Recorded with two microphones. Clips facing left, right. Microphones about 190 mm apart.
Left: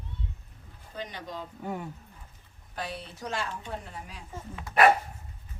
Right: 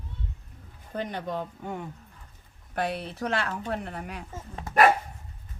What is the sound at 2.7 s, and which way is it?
Speech, 60° right (ahead or behind).